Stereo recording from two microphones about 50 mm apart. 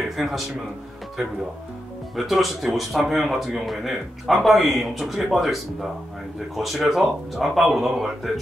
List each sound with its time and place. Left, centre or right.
0.1 s speech: centre
2.1 s speech: centre